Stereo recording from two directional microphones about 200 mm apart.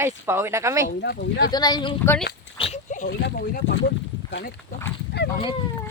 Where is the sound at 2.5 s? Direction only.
30° left (ahead or behind).